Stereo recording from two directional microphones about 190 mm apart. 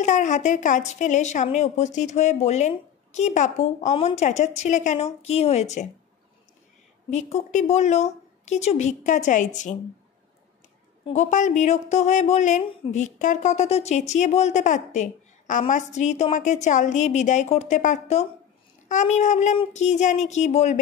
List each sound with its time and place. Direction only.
0.0 s a woman's voice: 40° left (ahead or behind)
7.1 s a woman's voice: 35° left (ahead or behind)
11.1 s a woman's voice: 40° left (ahead or behind)